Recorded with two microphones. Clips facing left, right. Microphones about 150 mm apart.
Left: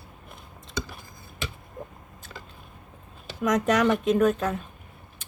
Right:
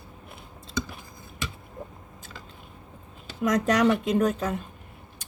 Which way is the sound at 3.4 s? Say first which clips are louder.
Even; 10° right (ahead or behind).